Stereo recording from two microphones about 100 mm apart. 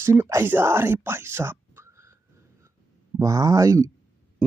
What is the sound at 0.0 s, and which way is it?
Speech, 25° right (ahead or behind).